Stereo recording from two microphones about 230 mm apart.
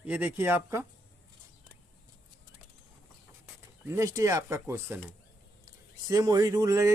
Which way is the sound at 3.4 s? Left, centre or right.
Centre.